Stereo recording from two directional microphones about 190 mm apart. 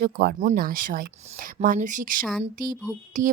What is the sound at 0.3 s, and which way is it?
Speech, 45° right (ahead or behind).